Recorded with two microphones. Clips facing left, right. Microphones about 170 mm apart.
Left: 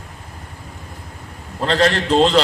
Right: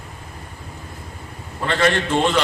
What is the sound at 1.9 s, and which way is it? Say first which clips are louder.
Speech: left 4 dB; 35° left (ahead or behind).